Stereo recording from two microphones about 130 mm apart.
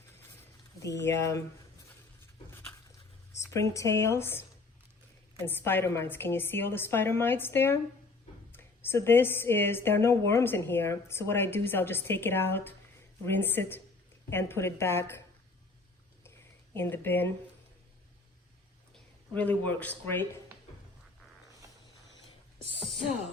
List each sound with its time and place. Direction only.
0.8 s speech: 25° left (ahead or behind)
3.5 s speech: 20° left (ahead or behind)
5.6 s a woman's voice: 15° left (ahead or behind)
16.7 s a woman's voice: 15° left (ahead or behind)
18.9 s speech: 10° left (ahead or behind)